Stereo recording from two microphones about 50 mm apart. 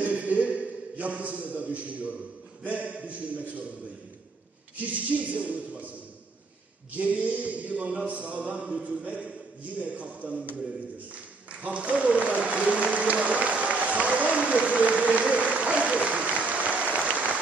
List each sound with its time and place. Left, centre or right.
0.0 s a sound: right
2.6 s mantra: right
4.7 s mantra: right
11.6 s applause: right